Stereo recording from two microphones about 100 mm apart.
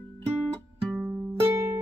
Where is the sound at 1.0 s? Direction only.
25° right (ahead or behind).